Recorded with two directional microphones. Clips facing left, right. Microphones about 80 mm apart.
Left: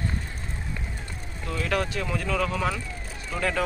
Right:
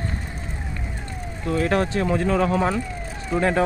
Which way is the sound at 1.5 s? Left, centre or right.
Right.